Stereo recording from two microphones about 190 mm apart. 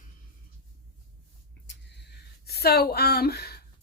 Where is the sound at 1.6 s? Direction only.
60° left (ahead or behind).